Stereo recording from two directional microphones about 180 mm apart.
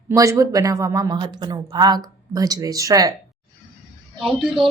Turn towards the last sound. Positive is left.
turn(degrees=0)  # may be behind; listen again after turning